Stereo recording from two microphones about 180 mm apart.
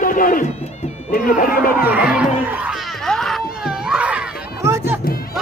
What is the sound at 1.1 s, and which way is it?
Speech, 50° left (ahead or behind).